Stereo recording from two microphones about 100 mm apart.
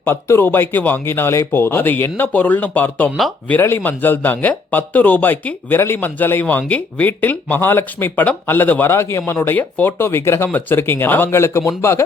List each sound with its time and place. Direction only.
0.0 s speech: 25° left (ahead or behind)